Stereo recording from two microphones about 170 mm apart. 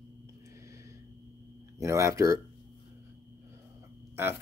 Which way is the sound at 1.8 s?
15° right (ahead or behind).